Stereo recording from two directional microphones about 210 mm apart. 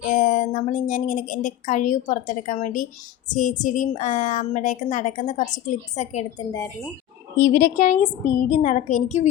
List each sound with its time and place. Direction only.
0.0 s a woman's voice: 40° left (ahead or behind)
7.3 s a woman's voice: 40° left (ahead or behind)